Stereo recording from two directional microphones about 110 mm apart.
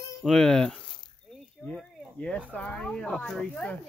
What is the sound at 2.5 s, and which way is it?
Speech, 10° left (ahead or behind).